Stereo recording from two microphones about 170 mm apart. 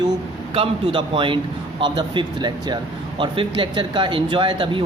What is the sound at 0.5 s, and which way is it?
Speech, 30° right (ahead or behind).